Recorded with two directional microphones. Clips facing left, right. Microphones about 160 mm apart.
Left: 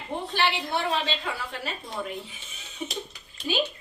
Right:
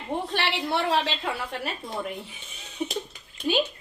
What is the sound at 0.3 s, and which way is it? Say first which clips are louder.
Speech: left 1 dB; 75° right (ahead or behind).